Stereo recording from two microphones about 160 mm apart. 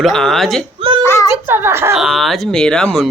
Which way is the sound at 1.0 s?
15° left (ahead or behind).